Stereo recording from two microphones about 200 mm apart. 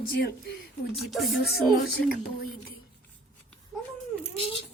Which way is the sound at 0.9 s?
Centre (ahead or behind).